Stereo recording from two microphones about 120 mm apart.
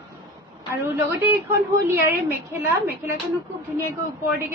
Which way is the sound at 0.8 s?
25° right (ahead or behind).